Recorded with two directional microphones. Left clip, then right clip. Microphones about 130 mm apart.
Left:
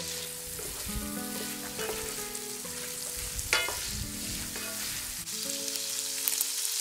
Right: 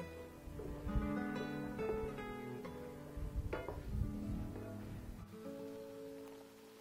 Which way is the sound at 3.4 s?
45° right (ahead or behind).